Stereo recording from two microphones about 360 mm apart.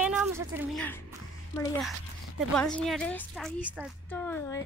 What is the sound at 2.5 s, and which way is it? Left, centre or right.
A woman's voice, centre.